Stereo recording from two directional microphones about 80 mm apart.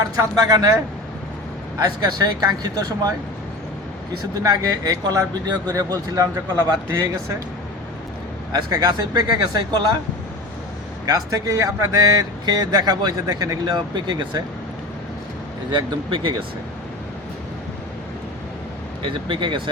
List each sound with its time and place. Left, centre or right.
0.0 s speech: right
1.8 s speech: right
4.4 s speech: right
8.5 s speech: right
11.0 s speech: right
15.7 s speech: right
19.0 s speech: right